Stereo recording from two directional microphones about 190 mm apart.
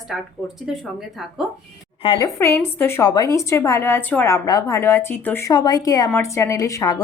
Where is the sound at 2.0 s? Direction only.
25° left (ahead or behind).